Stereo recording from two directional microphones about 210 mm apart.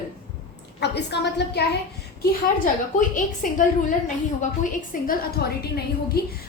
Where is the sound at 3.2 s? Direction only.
40° left (ahead or behind).